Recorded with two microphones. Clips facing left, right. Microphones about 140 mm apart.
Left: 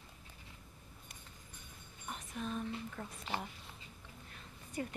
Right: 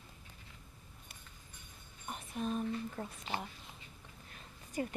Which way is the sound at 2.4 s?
25° right (ahead or behind).